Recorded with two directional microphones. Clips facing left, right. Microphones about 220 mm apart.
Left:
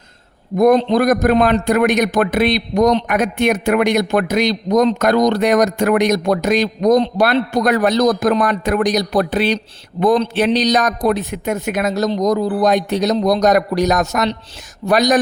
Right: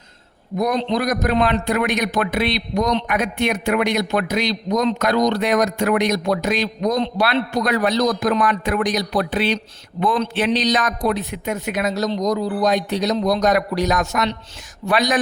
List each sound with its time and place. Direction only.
0.5 s a man's voice: 50° left (ahead or behind)